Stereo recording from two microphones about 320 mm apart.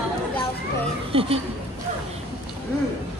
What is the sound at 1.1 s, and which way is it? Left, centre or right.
Speech, centre.